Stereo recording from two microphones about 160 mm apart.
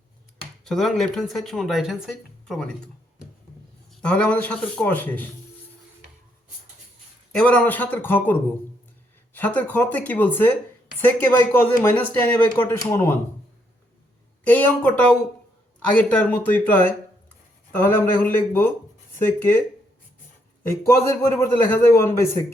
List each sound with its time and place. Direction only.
0.6 s speech: centre (ahead or behind)
4.0 s speech: 10° left (ahead or behind)
7.3 s speech: 5° left (ahead or behind)
14.4 s speech: 10° left (ahead or behind)
20.8 s speech: 15° left (ahead or behind)